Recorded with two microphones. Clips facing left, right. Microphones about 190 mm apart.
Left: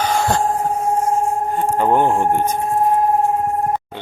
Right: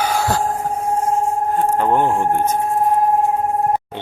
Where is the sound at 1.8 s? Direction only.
Centre (ahead or behind).